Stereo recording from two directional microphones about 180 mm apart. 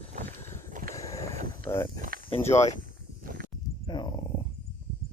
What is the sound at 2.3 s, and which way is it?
Speech, 35° left (ahead or behind).